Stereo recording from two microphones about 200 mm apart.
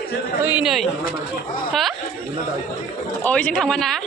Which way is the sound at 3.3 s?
5° left (ahead or behind).